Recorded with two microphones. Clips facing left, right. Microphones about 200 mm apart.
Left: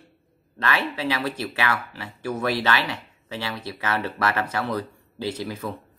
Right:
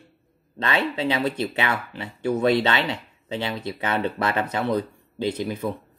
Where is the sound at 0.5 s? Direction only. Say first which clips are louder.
Right 2 dB; 20° right (ahead or behind).